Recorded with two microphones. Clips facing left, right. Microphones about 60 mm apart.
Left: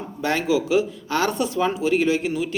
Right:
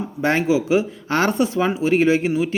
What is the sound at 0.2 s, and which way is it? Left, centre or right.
Speech, right.